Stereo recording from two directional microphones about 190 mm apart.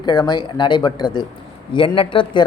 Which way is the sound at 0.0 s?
20° left (ahead or behind).